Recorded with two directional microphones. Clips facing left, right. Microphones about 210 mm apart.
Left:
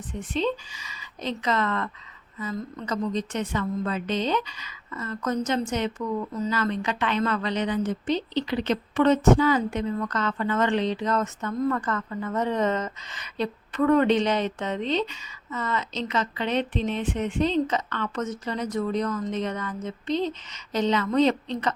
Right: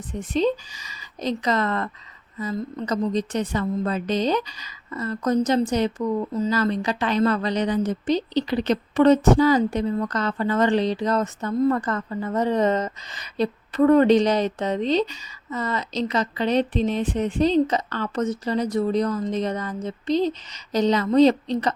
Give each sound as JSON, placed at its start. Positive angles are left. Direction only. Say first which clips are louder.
{"t": 0.1, "sound": "a woman's voice", "louder": "right 5 dB", "side_deg": -40}